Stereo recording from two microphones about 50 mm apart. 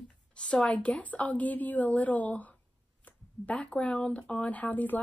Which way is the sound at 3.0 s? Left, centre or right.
Left.